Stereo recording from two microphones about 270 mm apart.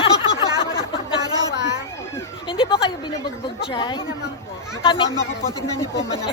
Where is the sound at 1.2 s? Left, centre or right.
Centre.